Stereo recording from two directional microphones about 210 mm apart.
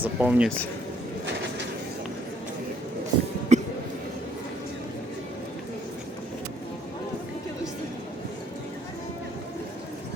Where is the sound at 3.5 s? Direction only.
35° right (ahead or behind).